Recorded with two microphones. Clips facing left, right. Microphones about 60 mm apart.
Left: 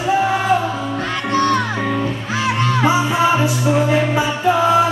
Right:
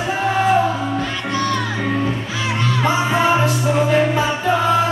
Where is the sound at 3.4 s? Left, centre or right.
Centre.